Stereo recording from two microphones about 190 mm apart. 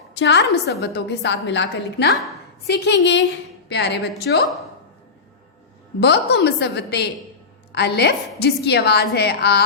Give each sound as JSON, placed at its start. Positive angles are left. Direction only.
{"t": 0.1, "sound": "a woman's voice", "side_deg": 65}
{"t": 6.0, "sound": "a woman's voice", "side_deg": 60}